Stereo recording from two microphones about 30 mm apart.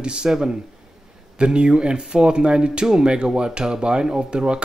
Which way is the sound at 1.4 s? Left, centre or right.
Right.